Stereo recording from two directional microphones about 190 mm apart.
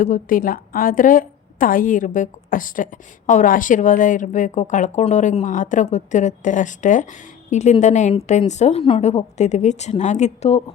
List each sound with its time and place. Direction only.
0.0 s a woman's voice: 45° left (ahead or behind)